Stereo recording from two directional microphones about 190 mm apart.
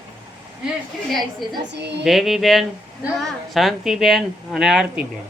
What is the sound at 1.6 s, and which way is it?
Speech, 65° right (ahead or behind).